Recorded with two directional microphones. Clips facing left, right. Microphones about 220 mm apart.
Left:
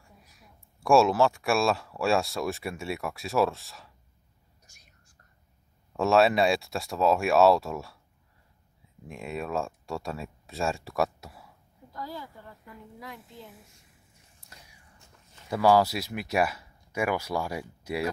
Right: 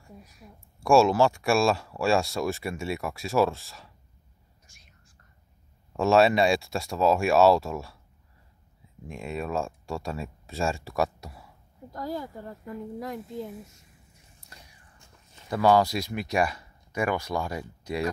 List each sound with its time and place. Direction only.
0.7 s speech: centre (ahead or behind)
5.9 s speech: centre (ahead or behind)
9.0 s speech: centre (ahead or behind)
11.9 s speech: 45° right (ahead or behind)
14.5 s a sound: 5° left (ahead or behind)
15.5 s speech: 5° left (ahead or behind)